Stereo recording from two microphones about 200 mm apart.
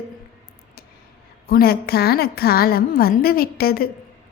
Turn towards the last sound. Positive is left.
turn(degrees=50)  # may be behind; listen again after turning